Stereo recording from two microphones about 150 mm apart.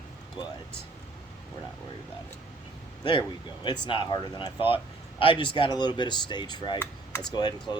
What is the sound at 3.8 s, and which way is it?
Speech, 35° left (ahead or behind).